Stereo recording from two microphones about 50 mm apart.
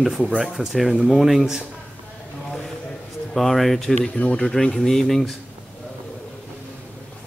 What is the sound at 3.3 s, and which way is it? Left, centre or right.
Speech, centre.